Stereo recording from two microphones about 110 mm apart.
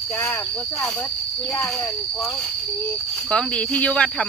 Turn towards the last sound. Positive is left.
turn(degrees=10)  # may be behind; listen again after turning